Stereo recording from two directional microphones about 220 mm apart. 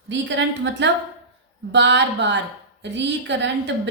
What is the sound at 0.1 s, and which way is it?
A woman's voice, 55° right (ahead or behind).